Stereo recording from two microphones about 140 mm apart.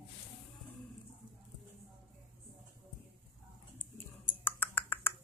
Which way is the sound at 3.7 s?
15° left (ahead or behind).